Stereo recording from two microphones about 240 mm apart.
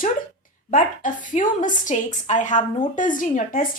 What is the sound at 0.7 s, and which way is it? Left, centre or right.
A woman's voice, left.